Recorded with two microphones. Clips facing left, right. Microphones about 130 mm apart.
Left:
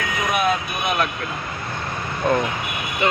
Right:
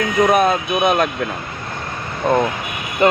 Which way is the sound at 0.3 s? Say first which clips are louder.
Right 6 dB; 40° right (ahead or behind).